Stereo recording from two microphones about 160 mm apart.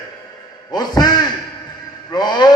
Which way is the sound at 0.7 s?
25° left (ahead or behind).